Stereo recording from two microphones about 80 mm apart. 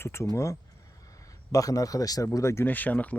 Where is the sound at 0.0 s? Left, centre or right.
Left.